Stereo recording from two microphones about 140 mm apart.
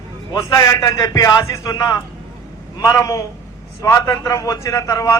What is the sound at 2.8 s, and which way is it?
A man's voice, 25° left (ahead or behind).